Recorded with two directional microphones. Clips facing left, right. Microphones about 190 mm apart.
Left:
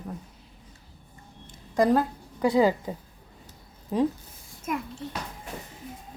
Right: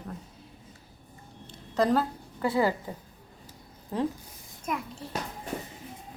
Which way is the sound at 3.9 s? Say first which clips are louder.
Left 5 dB; 15° left (ahead or behind).